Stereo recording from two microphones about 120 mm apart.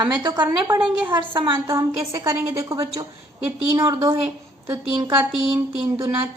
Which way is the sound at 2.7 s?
30° right (ahead or behind).